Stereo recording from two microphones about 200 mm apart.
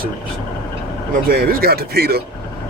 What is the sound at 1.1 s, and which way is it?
Speech, 45° right (ahead or behind).